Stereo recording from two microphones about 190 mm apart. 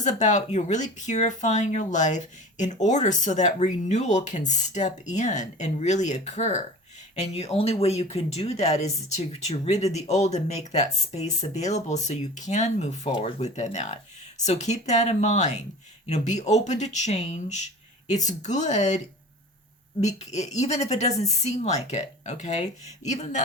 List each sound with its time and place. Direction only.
0.0 s speech: 40° left (ahead or behind)